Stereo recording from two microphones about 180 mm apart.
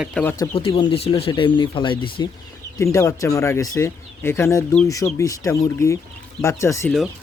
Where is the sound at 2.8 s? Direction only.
15° left (ahead or behind).